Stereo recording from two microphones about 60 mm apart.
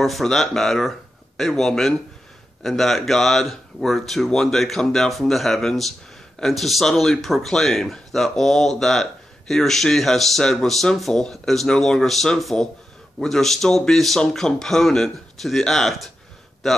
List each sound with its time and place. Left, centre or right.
0.0 s a man's voice: centre